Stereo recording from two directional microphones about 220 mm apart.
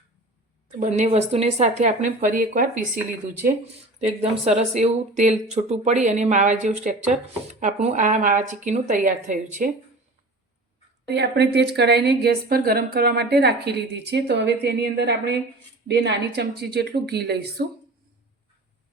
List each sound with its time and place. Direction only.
0.8 s speech: 30° right (ahead or behind)
4.2 s speech: 30° right (ahead or behind)
11.1 s a woman's voice: 50° right (ahead or behind)